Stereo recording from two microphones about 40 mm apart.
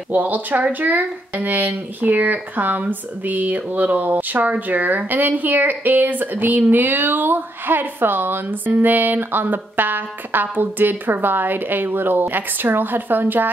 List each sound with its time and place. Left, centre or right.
0.1 s speech: right